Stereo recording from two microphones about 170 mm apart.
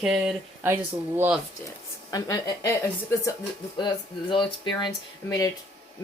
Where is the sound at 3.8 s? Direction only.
25° left (ahead or behind).